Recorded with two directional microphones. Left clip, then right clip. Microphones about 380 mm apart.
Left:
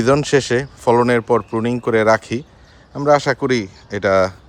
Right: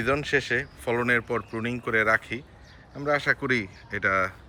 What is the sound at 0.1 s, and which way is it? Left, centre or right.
A man's voice, centre.